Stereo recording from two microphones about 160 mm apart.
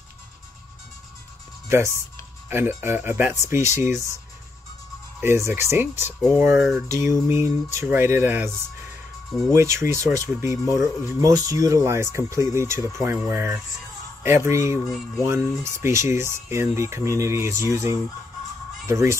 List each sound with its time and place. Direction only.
1.7 s speech: 15° right (ahead or behind)
5.2 s speech: 15° right (ahead or behind)
9.5 s speech: 20° right (ahead or behind)